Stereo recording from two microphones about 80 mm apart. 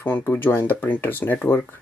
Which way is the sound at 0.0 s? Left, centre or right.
Left.